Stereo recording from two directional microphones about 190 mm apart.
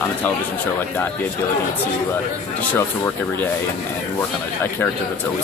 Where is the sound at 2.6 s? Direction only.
10° left (ahead or behind).